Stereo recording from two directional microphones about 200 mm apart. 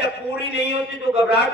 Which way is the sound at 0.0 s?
55° left (ahead or behind).